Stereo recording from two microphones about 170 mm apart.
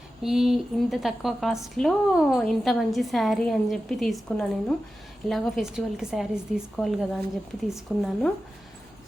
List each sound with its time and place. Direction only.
0.2 s a woman's voice: centre (ahead or behind)